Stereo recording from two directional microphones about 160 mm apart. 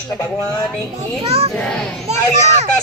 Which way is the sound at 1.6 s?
5° left (ahead or behind).